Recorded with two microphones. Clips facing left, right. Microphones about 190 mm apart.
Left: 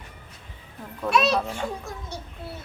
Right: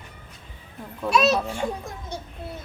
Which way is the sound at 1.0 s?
Centre (ahead or behind).